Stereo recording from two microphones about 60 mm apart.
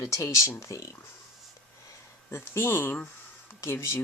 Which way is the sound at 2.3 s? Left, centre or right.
Left.